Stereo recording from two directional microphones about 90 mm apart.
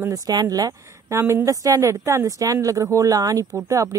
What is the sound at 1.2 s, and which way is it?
Speech, 30° right (ahead or behind).